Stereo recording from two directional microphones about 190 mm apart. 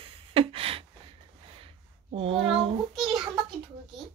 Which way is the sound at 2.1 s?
30° right (ahead or behind).